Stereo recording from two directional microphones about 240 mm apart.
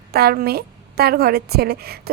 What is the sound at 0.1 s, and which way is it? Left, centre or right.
A woman's voice, right.